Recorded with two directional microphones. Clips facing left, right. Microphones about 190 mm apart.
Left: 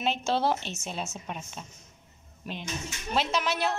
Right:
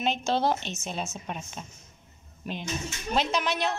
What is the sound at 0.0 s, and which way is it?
Speech, 5° left (ahead or behind).